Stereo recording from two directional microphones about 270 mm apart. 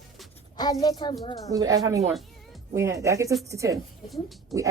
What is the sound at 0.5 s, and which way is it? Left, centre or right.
Speech, centre.